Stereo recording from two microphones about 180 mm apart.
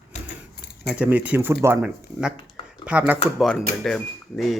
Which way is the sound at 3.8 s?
5° left (ahead or behind).